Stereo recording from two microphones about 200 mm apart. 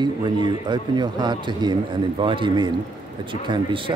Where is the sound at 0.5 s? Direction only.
20° right (ahead or behind).